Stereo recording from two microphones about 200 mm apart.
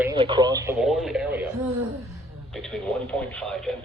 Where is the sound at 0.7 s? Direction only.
Centre (ahead or behind).